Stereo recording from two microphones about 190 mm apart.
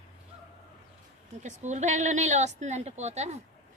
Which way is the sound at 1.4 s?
40° right (ahead or behind).